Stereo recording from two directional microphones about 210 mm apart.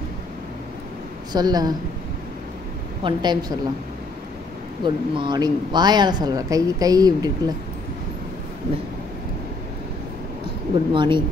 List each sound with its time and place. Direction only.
1.3 s speech: 20° right (ahead or behind)
3.0 s speech: 20° right (ahead or behind)
4.8 s speech: 20° right (ahead or behind)
10.4 s speech: 25° right (ahead or behind)